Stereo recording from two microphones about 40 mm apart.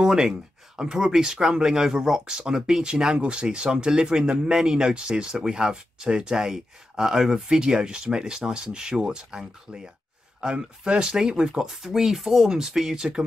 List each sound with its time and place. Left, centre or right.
0.0 s speech: centre